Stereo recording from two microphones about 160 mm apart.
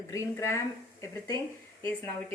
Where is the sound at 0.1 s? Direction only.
20° left (ahead or behind).